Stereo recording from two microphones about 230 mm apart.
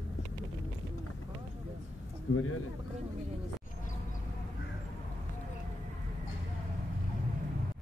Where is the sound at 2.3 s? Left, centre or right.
Left.